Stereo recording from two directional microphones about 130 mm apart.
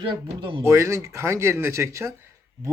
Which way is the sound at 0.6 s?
20° right (ahead or behind).